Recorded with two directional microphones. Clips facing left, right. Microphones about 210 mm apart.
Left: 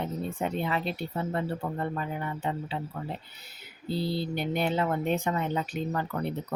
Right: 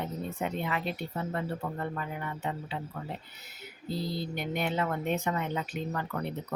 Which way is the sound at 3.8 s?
30° left (ahead or behind).